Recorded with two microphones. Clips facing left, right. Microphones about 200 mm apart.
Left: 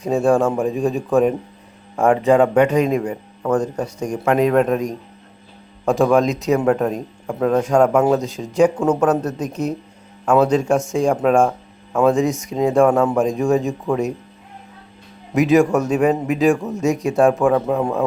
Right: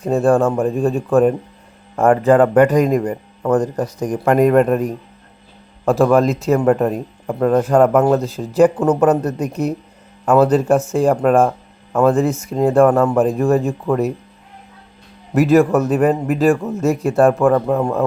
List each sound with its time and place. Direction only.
0.1 s speech: centre (ahead or behind)
2.9 s speech: 10° left (ahead or behind)
3.8 s speech: 35° right (ahead or behind)
4.2 s speech: 5° right (ahead or behind)
15.3 s speech: centre (ahead or behind)